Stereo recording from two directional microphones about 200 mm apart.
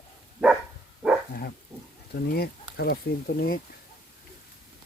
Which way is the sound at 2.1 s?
50° left (ahead or behind).